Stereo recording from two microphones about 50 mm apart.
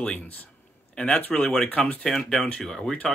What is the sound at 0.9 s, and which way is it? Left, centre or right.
Speech, left.